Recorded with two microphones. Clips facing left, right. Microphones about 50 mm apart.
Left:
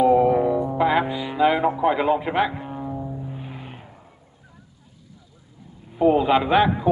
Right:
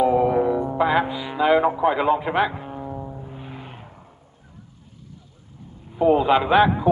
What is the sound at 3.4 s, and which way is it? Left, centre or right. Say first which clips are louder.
Vehicle: even; centre.